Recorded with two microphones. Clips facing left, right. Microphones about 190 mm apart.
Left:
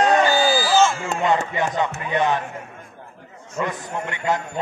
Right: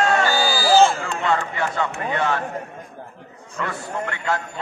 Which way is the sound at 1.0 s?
20° left (ahead or behind).